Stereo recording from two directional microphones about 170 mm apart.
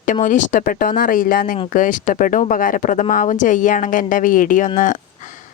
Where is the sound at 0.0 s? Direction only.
45° left (ahead or behind).